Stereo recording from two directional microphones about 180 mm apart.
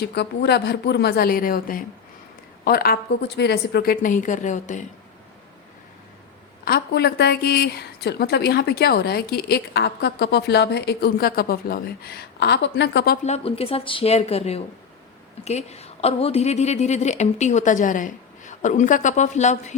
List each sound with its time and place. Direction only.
0.0 s a woman's voice: 65° left (ahead or behind); by 4.9 s 45° left (ahead or behind)
6.7 s a woman's voice: 60° left (ahead or behind)
13.2 s a woman's voice: 35° left (ahead or behind)